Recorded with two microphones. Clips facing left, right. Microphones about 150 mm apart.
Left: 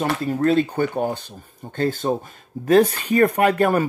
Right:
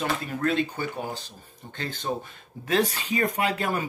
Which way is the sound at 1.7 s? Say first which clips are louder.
Left 9 dB; 45° left (ahead or behind).